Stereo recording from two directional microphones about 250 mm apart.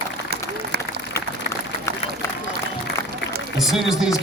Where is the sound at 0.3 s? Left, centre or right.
Right.